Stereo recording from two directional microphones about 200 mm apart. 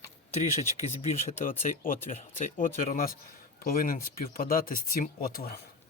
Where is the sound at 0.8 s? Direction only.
35° left (ahead or behind); by 5.5 s 50° left (ahead or behind).